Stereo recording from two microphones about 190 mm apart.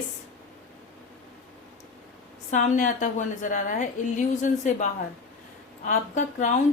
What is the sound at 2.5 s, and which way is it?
Speech, 40° left (ahead or behind).